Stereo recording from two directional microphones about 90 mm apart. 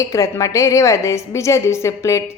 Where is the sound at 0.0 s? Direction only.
35° left (ahead or behind).